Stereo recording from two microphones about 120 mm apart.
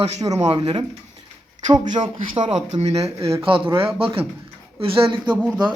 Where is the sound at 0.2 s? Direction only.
30° right (ahead or behind).